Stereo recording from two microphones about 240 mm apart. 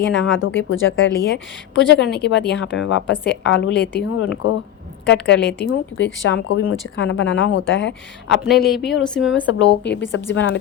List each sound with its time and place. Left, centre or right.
0.1 s a woman's voice: left
8.4 s speech: centre
9.5 s a woman's voice: left